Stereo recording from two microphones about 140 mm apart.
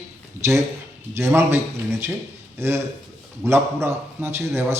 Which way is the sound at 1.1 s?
20° right (ahead or behind).